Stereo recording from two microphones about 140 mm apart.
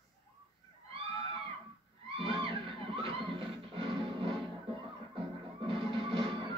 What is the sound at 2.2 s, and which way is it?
Music, 40° right (ahead or behind).